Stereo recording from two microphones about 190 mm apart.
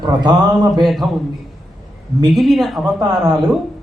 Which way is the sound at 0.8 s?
Centre (ahead or behind).